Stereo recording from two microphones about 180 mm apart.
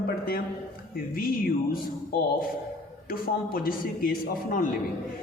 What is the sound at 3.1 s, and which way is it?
A man's voice, 55° left (ahead or behind).